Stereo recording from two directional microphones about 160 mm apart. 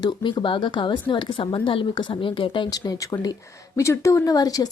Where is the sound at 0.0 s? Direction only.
30° left (ahead or behind).